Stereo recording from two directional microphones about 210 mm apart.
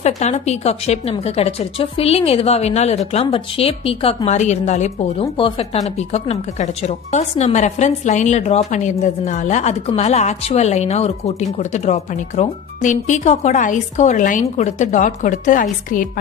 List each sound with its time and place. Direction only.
0.0 s a woman's voice: 30° left (ahead or behind)